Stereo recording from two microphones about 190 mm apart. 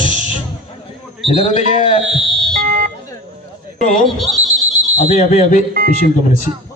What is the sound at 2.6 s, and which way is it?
Smoke detector, 45° right (ahead or behind).